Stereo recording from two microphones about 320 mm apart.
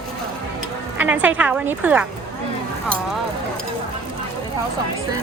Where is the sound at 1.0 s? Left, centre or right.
Centre.